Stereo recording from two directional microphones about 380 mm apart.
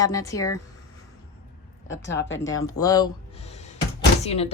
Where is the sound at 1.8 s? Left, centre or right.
Left.